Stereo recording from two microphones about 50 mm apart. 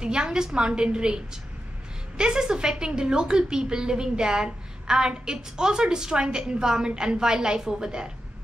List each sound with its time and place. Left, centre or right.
0.0 s a woman's voice: centre